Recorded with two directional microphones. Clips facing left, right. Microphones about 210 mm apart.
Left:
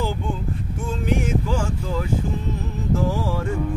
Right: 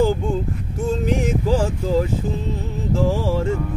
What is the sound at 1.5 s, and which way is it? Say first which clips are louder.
Speech: right 6 dB; 35° right (ahead or behind).